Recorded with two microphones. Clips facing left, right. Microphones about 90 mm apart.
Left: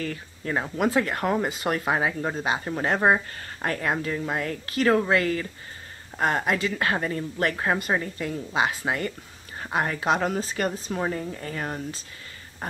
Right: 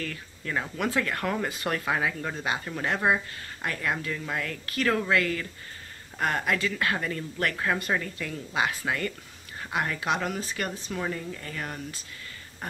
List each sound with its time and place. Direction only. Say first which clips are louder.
0.0 s speech: left 4 dB; 30° left (ahead or behind)